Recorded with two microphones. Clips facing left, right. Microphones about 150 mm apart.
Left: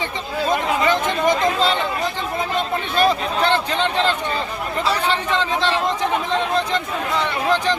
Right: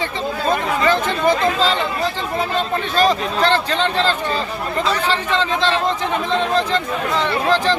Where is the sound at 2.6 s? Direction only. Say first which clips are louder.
Right 1 dB; 10° left (ahead or behind).